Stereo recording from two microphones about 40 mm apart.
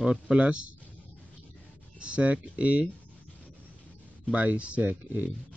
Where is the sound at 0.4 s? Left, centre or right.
Right.